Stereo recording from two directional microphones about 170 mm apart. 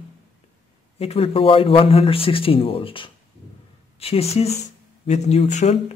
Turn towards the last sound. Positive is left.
turn(degrees=45)  # may be behind; listen again after turning